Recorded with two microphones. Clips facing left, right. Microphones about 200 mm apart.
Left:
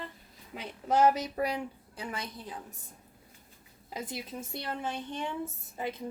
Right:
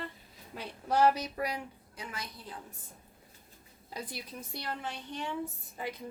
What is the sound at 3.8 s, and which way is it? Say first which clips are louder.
Speech: left 3 dB; 20° left (ahead or behind).